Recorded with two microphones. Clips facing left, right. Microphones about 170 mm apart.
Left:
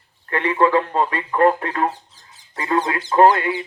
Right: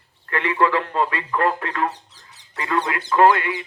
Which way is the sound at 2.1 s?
70° right (ahead or behind).